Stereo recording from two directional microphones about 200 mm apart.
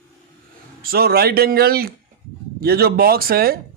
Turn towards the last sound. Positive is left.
turn(degrees=-50)  # may be behind; listen again after turning